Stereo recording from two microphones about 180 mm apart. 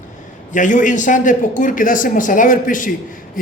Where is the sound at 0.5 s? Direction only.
45° left (ahead or behind).